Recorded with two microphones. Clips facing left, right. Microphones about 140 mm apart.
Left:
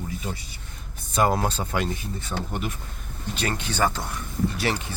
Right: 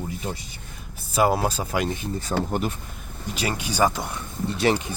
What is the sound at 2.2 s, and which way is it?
Speech, 35° right (ahead or behind).